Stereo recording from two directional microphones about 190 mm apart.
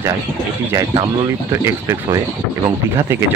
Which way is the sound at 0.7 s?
15° right (ahead or behind).